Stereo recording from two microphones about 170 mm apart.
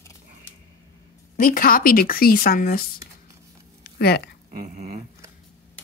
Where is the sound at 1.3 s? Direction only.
55° left (ahead or behind).